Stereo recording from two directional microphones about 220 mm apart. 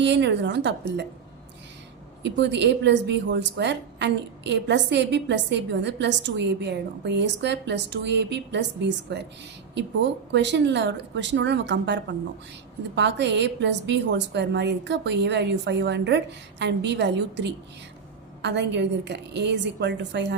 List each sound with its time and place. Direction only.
0.0 s a woman's voice: 50° right (ahead or behind)
2.2 s a woman's voice: 55° right (ahead or behind)